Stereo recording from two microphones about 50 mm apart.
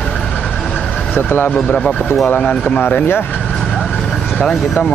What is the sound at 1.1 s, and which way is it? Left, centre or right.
Speech, left.